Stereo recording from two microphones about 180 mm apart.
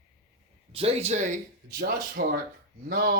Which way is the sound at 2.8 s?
70° right (ahead or behind).